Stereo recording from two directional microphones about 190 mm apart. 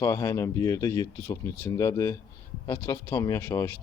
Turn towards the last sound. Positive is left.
turn(degrees=15)  # may be behind; listen again after turning